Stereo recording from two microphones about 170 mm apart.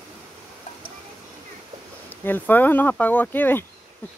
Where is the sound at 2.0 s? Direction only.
10° left (ahead or behind).